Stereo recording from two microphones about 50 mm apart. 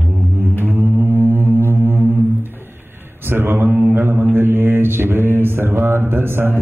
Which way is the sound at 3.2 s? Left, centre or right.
Right.